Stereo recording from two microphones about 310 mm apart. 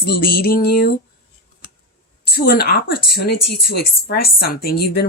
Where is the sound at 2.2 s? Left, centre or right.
Left.